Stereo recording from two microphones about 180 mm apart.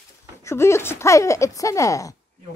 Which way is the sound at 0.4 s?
15° left (ahead or behind).